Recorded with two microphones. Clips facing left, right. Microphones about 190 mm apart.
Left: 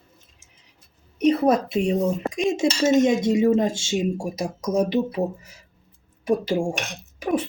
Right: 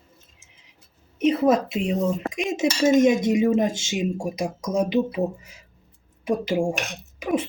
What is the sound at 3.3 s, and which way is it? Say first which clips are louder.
Speech: left 1 dB; 20° right (ahead or behind).